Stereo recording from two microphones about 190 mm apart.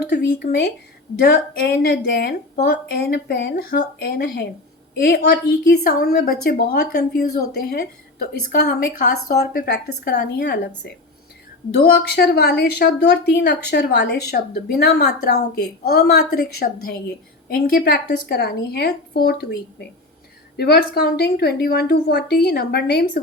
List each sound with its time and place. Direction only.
0.0 s a woman's voice: 60° left (ahead or behind)
11.7 s a woman's voice: 60° left (ahead or behind)
20.6 s a woman's voice: 55° left (ahead or behind)